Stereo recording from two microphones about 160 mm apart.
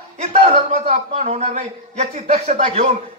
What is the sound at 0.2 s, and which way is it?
A man's voice, 50° right (ahead or behind).